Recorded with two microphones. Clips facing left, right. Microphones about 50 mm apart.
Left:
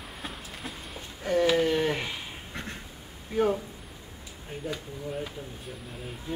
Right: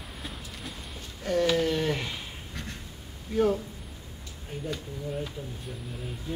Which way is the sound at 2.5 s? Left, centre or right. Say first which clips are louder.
Left 3 dB; left.